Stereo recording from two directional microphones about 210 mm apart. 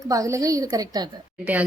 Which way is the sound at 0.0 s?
15° right (ahead or behind).